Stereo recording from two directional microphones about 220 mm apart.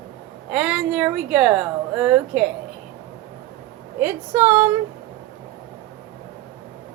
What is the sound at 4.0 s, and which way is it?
Speech, 10° right (ahead or behind).